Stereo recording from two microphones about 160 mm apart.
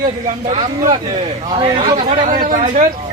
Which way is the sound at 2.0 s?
50° right (ahead or behind).